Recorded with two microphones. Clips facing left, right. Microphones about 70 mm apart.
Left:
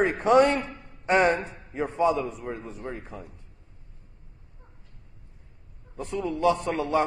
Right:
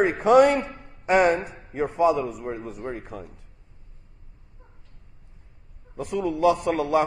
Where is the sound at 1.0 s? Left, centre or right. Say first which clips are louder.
Right 2 dB; centre.